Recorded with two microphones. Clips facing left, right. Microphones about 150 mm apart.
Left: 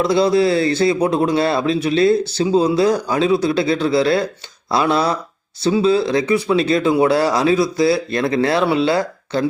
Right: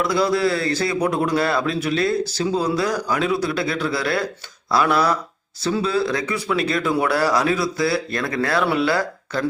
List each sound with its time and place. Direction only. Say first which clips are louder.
0.0 s a man's voice: left 5 dB; 25° left (ahead or behind)